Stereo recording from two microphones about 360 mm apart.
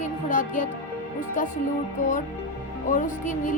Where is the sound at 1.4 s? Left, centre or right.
Left.